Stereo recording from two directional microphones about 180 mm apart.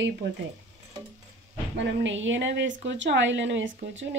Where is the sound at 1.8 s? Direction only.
85° right.